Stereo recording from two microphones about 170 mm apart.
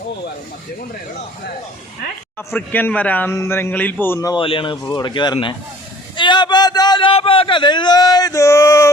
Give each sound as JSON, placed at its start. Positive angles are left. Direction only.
{"t": 2.6, "sound": "a man's voice", "side_deg": 10}